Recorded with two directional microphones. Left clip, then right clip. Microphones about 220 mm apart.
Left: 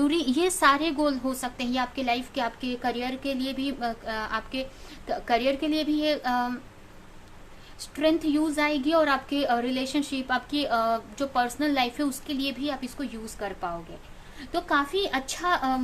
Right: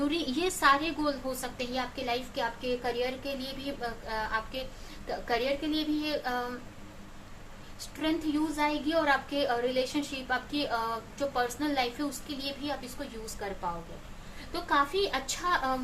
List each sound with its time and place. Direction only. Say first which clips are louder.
0.0 s a woman's voice: left 6 dB; 40° left (ahead or behind)
8.0 s a woman's voice: left 7 dB; 45° left (ahead or behind)
14.7 s a woman's voice: left 1 dB; 45° left (ahead or behind)